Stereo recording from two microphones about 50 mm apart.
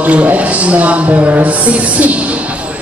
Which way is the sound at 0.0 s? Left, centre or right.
Right.